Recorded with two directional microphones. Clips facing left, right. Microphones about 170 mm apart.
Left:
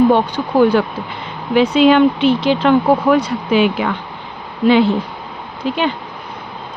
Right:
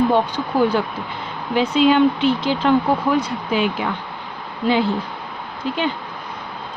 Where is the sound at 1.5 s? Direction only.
75° left (ahead or behind).